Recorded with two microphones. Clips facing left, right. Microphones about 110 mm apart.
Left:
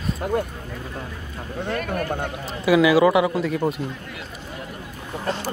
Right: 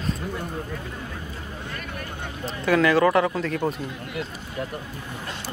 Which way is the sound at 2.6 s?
10° left (ahead or behind).